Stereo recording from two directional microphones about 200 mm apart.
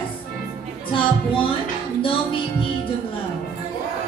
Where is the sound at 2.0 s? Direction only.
25° left (ahead or behind).